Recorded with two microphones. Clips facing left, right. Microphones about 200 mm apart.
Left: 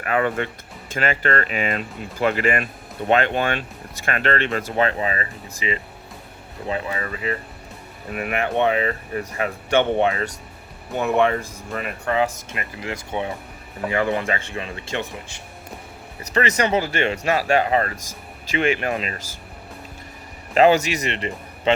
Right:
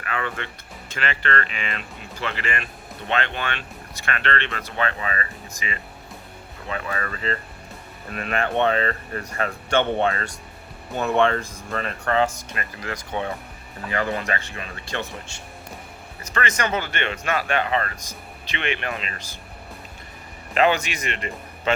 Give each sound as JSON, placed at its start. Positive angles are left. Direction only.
{"t": 0.1, "sound": "speech", "side_deg": 45}
{"t": 16.3, "sound": "speech", "side_deg": 35}
{"t": 20.5, "sound": "speech", "side_deg": 35}
{"t": 21.1, "sound": "speech", "side_deg": 25}